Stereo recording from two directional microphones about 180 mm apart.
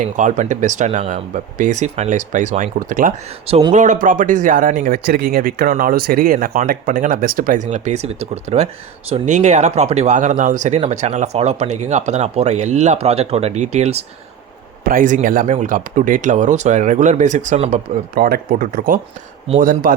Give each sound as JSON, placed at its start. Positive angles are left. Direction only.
{"t": 0.0, "sound": "speech", "side_deg": -45}
{"t": 3.4, "sound": "speech", "side_deg": -35}
{"t": 14.8, "sound": "speech", "side_deg": -50}
{"t": 18.2, "sound": "speech", "side_deg": -55}